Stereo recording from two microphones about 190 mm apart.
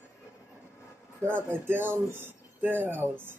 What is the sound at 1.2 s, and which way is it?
Speech, 10° right (ahead or behind).